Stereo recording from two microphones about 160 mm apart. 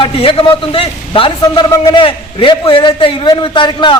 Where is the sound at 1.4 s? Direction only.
20° left (ahead or behind).